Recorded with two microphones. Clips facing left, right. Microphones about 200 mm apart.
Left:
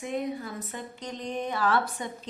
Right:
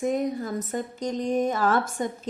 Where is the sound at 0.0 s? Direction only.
45° right (ahead or behind).